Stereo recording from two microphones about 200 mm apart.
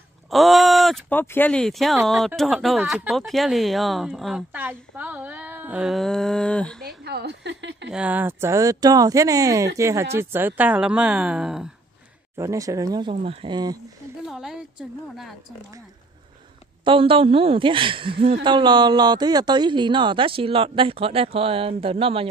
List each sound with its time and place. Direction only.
0.3 s speech: centre (ahead or behind)
6.8 s a woman's voice: 55° right (ahead or behind)
7.9 s speech: 5° right (ahead or behind)
12.4 s speech: 15° right (ahead or behind)
13.1 s a woman's voice: 30° right (ahead or behind)
14.2 s speech: centre (ahead or behind)
16.8 s a woman's voice: 25° right (ahead or behind)